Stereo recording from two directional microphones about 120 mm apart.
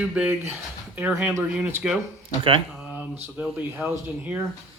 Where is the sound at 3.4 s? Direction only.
5° right (ahead or behind).